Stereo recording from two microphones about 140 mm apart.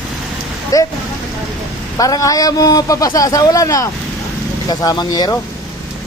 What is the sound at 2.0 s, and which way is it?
A man's voice, 25° left (ahead or behind).